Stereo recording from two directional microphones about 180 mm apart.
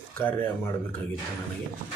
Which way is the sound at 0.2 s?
10° left (ahead or behind).